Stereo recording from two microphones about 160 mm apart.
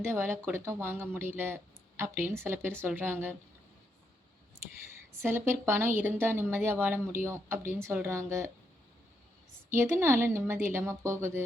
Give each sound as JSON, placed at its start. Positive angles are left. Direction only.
{"t": 0.0, "sound": "a woman's voice", "side_deg": -15}
{"t": 5.2, "sound": "a woman's voice", "side_deg": -15}
{"t": 9.6, "sound": "a woman's voice", "side_deg": -15}